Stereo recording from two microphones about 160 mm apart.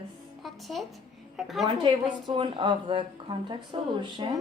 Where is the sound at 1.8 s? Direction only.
30° right (ahead or behind).